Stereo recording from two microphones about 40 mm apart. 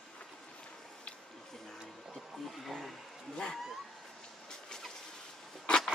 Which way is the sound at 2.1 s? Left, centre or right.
Centre.